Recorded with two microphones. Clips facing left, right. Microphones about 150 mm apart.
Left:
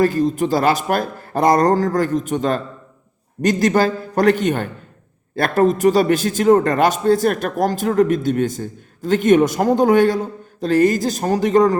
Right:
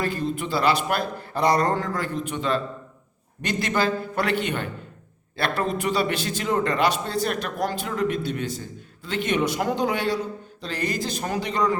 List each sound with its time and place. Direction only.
0.0 s a man's voice: 40° left (ahead or behind)